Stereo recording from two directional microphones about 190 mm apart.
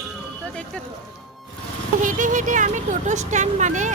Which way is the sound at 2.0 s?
45° right (ahead or behind).